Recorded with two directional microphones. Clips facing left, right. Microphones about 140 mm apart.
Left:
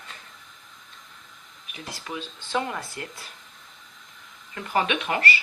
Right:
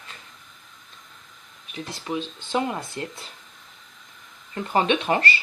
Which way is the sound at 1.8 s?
25° right (ahead or behind).